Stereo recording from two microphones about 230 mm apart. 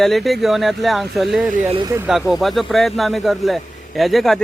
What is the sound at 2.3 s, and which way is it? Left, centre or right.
A man's voice, centre.